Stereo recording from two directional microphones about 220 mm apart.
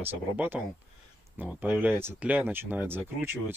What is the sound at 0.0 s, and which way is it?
Speech, 10° right (ahead or behind).